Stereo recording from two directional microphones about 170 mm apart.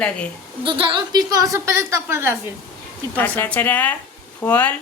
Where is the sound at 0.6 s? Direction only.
30° right (ahead or behind); by 2.4 s 15° right (ahead or behind).